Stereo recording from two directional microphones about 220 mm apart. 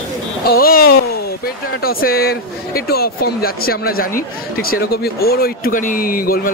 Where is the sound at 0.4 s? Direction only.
45° left (ahead or behind).